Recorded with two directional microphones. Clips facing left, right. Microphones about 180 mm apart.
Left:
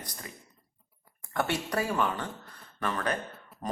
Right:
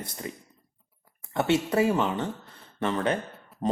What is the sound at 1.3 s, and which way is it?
Speech, 25° right (ahead or behind).